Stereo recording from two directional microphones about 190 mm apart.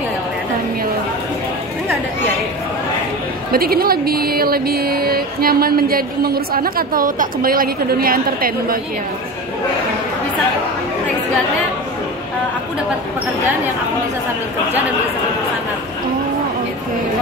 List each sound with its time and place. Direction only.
3.5 s speech: 50° right (ahead or behind)